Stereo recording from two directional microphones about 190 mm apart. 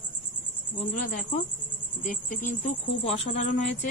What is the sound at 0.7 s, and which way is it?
Speech, 45° left (ahead or behind).